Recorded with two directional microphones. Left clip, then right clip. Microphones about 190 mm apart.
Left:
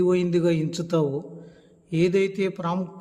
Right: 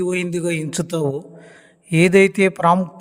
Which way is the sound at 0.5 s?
45° right (ahead or behind).